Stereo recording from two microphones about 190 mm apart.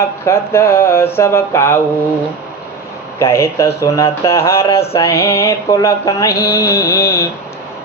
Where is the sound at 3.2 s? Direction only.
15° left (ahead or behind).